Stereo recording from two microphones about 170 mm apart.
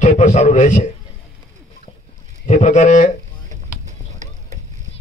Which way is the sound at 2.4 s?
45° left (ahead or behind).